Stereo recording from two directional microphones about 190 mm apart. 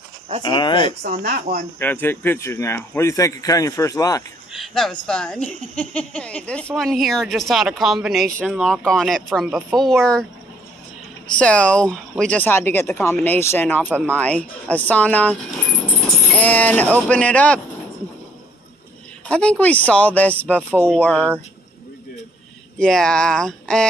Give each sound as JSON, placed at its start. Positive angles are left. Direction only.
{"t": 0.4, "sound": "speech", "side_deg": 25}
{"t": 1.0, "sound": "speech", "side_deg": -50}
{"t": 1.8, "sound": "speech", "side_deg": 10}
{"t": 4.5, "sound": "speech", "side_deg": 0}
{"t": 11.2, "sound": "speech", "side_deg": 5}
{"t": 13.8, "sound": "speech", "side_deg": -10}
{"t": 14.1, "sound": "speech", "side_deg": 5}
{"t": 19.2, "sound": "speech", "side_deg": 5}
{"t": 22.8, "sound": "speech", "side_deg": 5}